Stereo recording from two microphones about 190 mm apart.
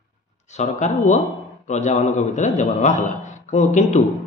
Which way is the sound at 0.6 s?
40° left (ahead or behind).